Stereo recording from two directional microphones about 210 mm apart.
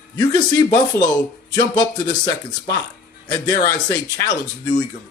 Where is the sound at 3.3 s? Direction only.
20° left (ahead or behind).